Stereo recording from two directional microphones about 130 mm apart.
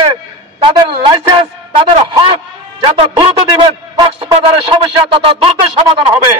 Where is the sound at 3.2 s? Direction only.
45° right (ahead or behind).